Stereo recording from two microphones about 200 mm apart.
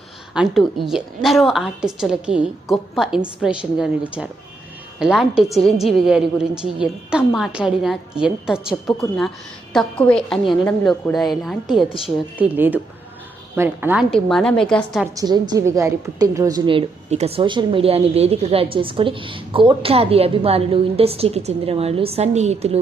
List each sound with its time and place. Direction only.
0.3 s a woman's voice: centre (ahead or behind)
14.1 s a woman's voice: centre (ahead or behind)
15.0 s a woman's voice: 15° right (ahead or behind); by 22.8 s 35° right (ahead or behind)